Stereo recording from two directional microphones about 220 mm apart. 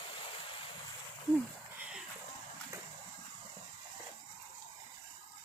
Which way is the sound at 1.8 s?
5° right (ahead or behind).